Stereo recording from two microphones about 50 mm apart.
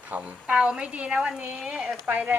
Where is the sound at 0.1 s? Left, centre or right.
Right.